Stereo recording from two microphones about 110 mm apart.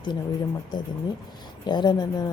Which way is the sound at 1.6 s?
40° left (ahead or behind).